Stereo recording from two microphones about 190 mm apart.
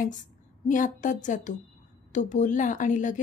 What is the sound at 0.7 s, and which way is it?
A woman's voice, 40° left (ahead or behind).